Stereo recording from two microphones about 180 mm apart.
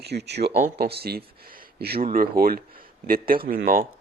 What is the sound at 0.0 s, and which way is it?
Speech, 70° right (ahead or behind).